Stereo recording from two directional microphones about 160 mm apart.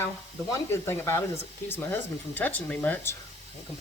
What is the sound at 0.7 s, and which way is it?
A woman's voice, 15° left (ahead or behind).